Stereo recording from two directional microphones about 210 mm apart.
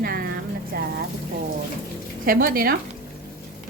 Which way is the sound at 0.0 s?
45° right (ahead or behind).